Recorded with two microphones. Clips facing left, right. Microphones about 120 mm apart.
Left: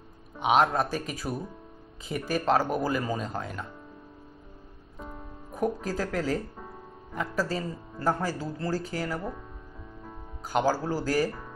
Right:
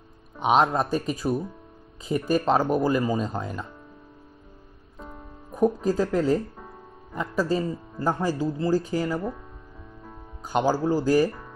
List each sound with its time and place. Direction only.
0.6 s speech: 20° right (ahead or behind)
4.9 s music: centre (ahead or behind)
5.5 s speech: 20° right (ahead or behind)
10.5 s speech: 20° right (ahead or behind)